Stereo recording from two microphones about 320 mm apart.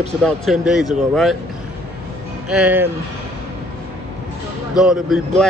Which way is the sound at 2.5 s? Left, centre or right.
Centre.